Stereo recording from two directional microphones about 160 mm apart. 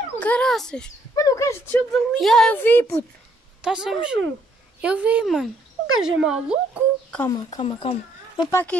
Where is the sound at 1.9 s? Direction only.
Centre (ahead or behind).